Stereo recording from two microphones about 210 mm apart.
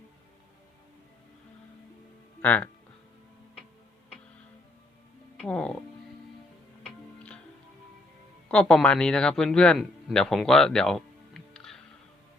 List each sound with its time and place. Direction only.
2.4 s speech: 5° left (ahead or behind)
5.4 s speech: 5° left (ahead or behind)
8.4 s a man's voice: 5° left (ahead or behind)